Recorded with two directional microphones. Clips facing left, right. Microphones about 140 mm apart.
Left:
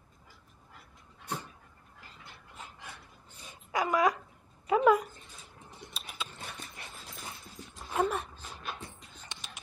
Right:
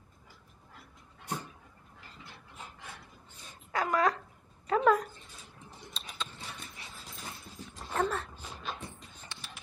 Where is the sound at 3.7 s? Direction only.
10° left (ahead or behind).